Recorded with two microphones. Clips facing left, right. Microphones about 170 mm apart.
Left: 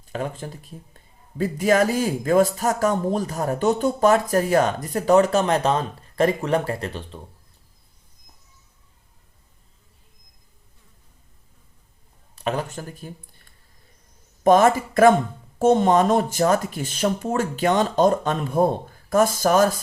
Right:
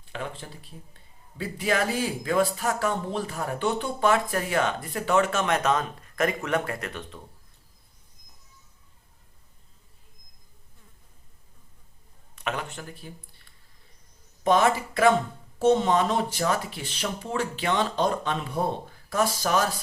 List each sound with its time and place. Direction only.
0.0 s speech: 45° left (ahead or behind)
12.4 s speech: 35° left (ahead or behind)